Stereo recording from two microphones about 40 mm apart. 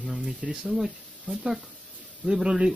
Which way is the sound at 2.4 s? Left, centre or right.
Centre.